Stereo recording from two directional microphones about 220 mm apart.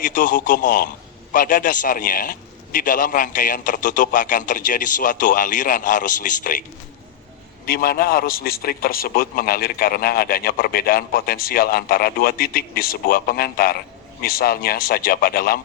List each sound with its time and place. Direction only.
0.0 s a man's voice: 40° left (ahead or behind)